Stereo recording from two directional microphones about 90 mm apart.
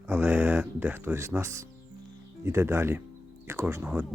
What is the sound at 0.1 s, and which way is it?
Speech, 20° right (ahead or behind).